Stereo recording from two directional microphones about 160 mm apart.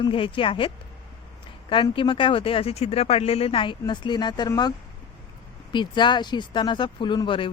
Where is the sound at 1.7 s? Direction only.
30° left (ahead or behind).